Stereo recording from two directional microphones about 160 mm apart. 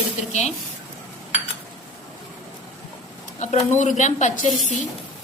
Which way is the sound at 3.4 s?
45° left (ahead or behind).